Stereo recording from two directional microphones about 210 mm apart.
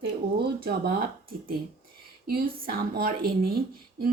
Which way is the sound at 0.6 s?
45° right (ahead or behind).